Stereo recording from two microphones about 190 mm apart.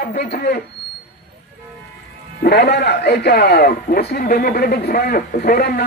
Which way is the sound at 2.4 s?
60° left (ahead or behind).